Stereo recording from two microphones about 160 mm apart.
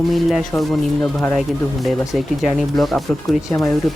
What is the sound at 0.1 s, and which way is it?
Speech, centre (ahead or behind).